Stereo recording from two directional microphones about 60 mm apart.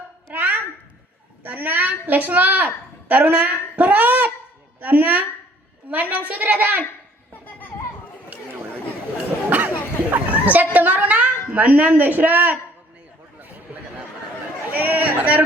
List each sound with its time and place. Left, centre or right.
0.3 s babbling: right
1.5 s a woman's voice: right
9.5 s a sound: right
14.7 s a man's voice: right